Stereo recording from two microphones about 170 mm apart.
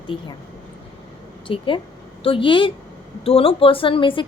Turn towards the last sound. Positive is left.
turn(degrees=30)  # may be behind; listen again after turning